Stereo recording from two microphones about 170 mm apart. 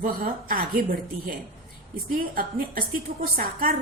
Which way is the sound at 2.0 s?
55° right (ahead or behind).